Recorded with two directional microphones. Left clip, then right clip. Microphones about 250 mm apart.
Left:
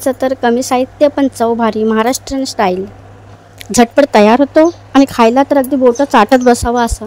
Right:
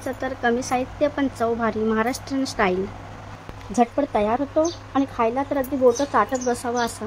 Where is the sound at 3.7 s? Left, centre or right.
Left.